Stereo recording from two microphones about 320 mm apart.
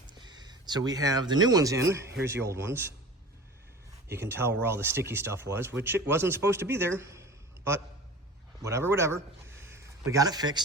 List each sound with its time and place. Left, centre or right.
0.1 s speech: centre
4.1 s speech: centre
9.6 s a sound: centre